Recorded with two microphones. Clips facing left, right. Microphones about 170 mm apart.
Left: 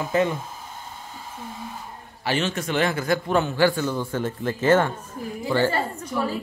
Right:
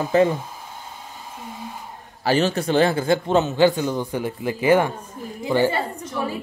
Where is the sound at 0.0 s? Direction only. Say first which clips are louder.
Right 5 dB; 35° right (ahead or behind).